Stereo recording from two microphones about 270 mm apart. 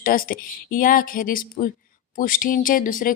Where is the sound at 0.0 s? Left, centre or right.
Left.